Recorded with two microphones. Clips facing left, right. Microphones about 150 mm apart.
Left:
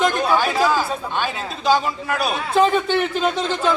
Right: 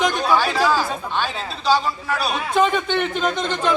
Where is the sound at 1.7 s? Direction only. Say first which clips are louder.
Left 1 dB; 50° left (ahead or behind).